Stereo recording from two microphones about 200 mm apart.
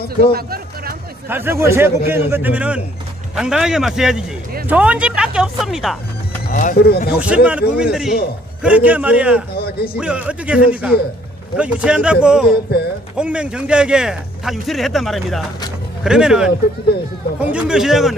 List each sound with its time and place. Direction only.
0.3 s a sound: 50° right (ahead or behind)
1.3 s a man's voice: 10° right (ahead or behind)
6.5 s speech: 40° left (ahead or behind)
7.2 s a man's voice: 5° right (ahead or behind)
9.6 s speech: 50° left (ahead or behind)
10.0 s a man's voice: 5° right (ahead or behind)